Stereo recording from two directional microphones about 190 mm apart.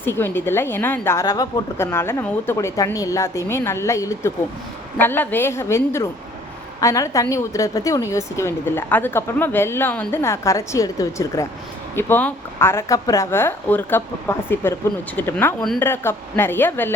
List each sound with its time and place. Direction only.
0.0 s a woman's voice: 10° left (ahead or behind)
15.9 s a woman's voice: 10° left (ahead or behind)